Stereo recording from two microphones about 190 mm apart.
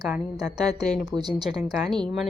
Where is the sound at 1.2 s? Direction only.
20° right (ahead or behind).